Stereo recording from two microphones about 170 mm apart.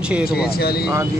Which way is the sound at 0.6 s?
65° left (ahead or behind).